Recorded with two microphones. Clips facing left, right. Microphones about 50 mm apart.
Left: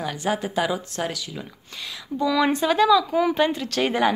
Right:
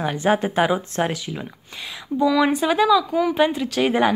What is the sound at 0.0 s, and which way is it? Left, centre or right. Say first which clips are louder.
Speech: right 6 dB; right.